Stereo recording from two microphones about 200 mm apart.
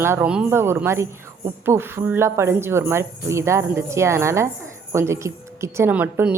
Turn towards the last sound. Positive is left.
turn(degrees=-5)  # may be behind; listen again after turning